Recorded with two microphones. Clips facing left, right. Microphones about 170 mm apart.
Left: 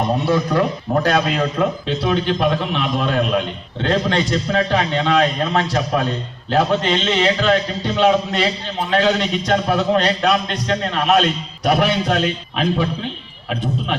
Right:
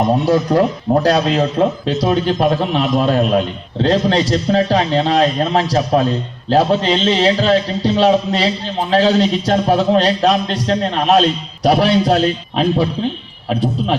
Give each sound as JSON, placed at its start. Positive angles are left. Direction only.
{"t": 0.9, "sound": "a man's voice", "side_deg": -30}
{"t": 1.9, "sound": "a man's voice", "side_deg": -40}